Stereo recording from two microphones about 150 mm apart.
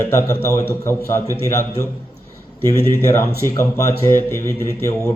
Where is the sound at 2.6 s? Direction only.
15° left (ahead or behind).